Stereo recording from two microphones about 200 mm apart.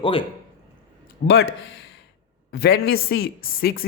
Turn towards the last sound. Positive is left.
turn(degrees=45)  # may be behind; listen again after turning